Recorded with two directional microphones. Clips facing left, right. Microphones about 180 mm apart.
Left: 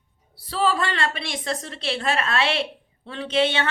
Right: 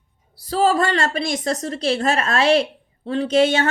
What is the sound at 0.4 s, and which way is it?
A woman's voice, 40° right (ahead or behind).